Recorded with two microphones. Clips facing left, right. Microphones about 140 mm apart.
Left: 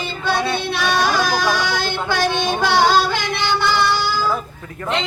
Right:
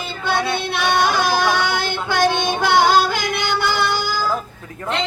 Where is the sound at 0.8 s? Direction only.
20° right (ahead or behind).